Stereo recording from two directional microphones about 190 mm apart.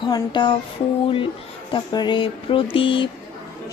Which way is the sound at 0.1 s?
25° left (ahead or behind).